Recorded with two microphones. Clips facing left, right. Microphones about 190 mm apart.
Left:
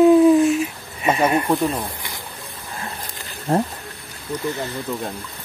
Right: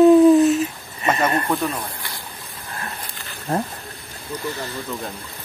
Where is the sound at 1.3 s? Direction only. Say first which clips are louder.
Left 3 dB; 15° left (ahead or behind).